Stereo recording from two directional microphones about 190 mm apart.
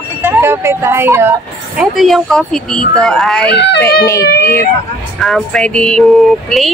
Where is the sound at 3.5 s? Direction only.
65° left (ahead or behind).